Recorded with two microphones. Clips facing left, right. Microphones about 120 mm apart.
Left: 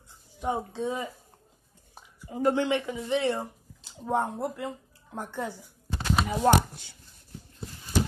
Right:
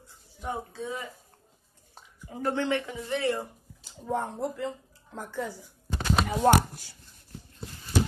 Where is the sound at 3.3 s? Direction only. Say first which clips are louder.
Left 1 dB; 70° left (ahead or behind).